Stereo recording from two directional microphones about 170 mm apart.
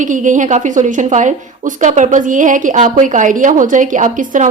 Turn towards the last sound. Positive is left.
turn(degrees=-50)  # may be behind; listen again after turning